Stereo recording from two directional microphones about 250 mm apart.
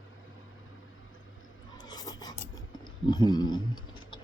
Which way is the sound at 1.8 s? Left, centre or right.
Centre.